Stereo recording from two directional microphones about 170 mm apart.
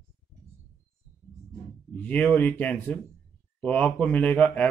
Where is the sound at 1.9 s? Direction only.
10° left (ahead or behind).